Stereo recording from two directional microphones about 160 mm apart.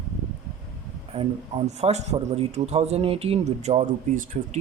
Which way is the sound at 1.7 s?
45° right (ahead or behind).